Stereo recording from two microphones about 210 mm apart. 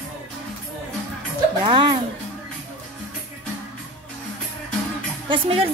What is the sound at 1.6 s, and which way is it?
Speech, 20° right (ahead or behind).